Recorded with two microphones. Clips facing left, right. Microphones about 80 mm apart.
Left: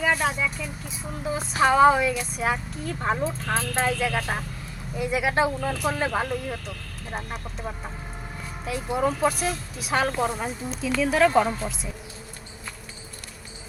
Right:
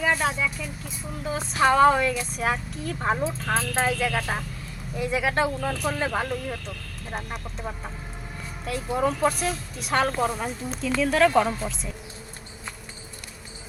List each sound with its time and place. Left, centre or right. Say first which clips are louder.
0.0 s speech: even; centre